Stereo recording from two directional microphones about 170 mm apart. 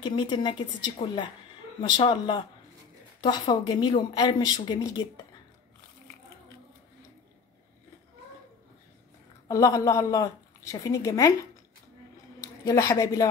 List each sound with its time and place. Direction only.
0.0 s speech: 25° left (ahead or behind)
9.5 s speech: 20° left (ahead or behind)
12.6 s speech: 20° left (ahead or behind)